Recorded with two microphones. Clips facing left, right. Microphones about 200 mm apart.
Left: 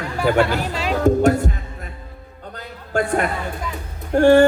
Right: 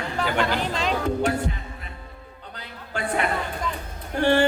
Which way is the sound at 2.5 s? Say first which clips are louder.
Left 11 dB; 45° left (ahead or behind).